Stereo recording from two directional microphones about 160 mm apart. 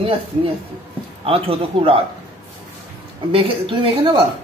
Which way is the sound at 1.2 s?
35° right (ahead or behind).